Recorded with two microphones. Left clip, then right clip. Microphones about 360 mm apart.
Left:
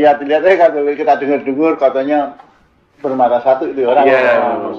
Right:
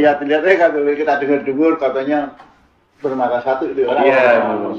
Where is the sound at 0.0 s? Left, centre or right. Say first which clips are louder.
Left 3 dB; left.